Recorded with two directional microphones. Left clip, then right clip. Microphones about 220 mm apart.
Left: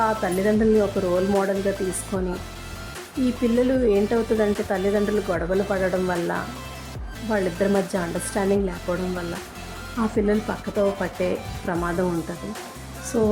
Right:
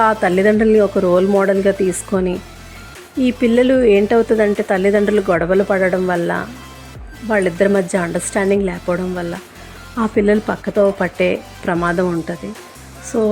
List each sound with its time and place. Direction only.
0.0 s speech: 20° right (ahead or behind)
13.1 s speech: 10° right (ahead or behind)